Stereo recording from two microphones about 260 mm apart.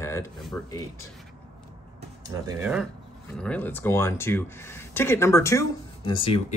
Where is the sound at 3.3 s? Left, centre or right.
Centre.